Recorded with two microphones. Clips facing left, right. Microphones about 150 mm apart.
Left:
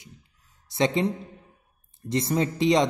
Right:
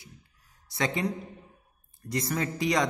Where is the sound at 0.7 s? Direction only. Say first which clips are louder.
Left 6 dB; 25° left (ahead or behind).